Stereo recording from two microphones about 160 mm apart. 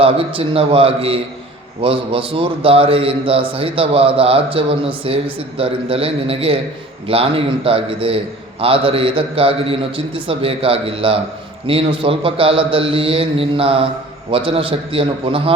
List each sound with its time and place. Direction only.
0.0 s a man's voice: 35° right (ahead or behind)